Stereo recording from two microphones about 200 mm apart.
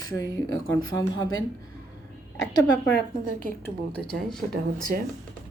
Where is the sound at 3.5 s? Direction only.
10° left (ahead or behind).